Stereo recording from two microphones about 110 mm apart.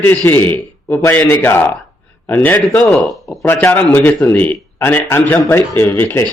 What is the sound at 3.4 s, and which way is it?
A man's voice, 20° left (ahead or behind).